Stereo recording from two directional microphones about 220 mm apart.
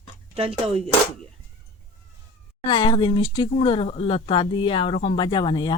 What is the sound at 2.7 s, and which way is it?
Speech, 20° left (ahead or behind).